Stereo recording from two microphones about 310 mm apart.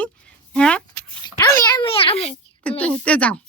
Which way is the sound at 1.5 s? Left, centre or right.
Centre.